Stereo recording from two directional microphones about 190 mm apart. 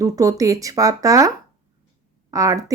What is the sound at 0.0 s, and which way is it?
Speech, 20° right (ahead or behind).